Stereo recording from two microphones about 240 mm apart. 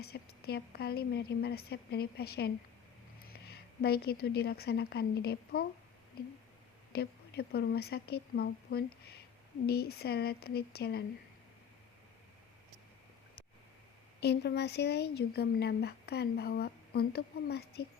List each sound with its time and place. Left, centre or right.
0.0 s a woman's voice: left
6.9 s a woman's voice: left
14.2 s speech: left